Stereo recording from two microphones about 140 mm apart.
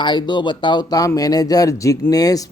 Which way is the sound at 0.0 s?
35° left (ahead or behind).